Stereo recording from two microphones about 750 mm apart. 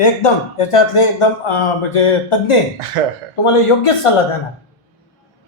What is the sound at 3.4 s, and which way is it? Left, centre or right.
Speech, left.